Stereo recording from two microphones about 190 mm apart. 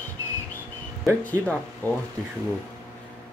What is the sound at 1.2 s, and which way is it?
Speech, 10° left (ahead or behind).